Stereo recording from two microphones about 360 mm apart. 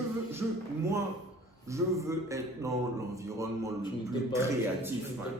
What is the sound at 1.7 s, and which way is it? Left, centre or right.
A man's voice, centre.